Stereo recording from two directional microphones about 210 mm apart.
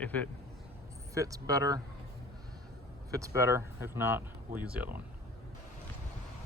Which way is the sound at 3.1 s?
15° right (ahead or behind).